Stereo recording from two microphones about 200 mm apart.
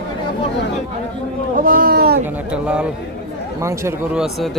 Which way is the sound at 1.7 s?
45° right (ahead or behind).